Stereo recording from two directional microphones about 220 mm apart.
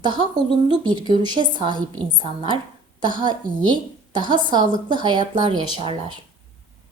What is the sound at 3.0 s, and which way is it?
A woman's voice, 20° right (ahead or behind).